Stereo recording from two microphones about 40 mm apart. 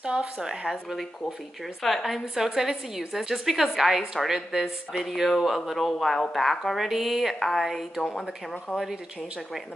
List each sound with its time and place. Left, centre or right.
0.0 s a woman's voice: right
0.4 s a woman's voice: centre
1.8 s speech: centre
2.3 s a woman's voice: centre
7.3 s a woman's voice: centre